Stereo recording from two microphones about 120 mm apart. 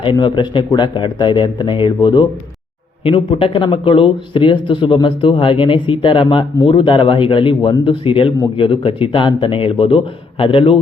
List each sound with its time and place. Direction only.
0.0 s speech: 40° left (ahead or behind)